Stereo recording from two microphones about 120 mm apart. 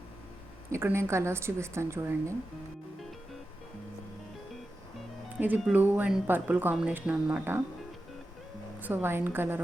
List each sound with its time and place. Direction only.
0.7 s speech: 20° right (ahead or behind)
5.4 s speech: 10° right (ahead or behind)
8.8 s speech: 15° right (ahead or behind)